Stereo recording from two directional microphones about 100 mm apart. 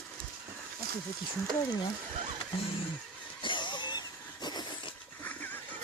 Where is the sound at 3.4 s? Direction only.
50° left (ahead or behind).